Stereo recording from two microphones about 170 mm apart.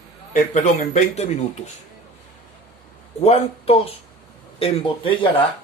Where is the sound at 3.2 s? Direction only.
40° left (ahead or behind).